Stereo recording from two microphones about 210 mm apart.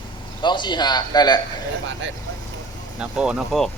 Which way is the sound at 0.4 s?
20° left (ahead or behind).